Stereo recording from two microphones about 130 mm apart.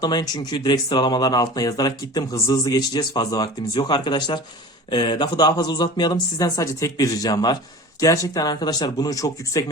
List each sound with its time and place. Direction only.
0.0 s speech: 30° left (ahead or behind)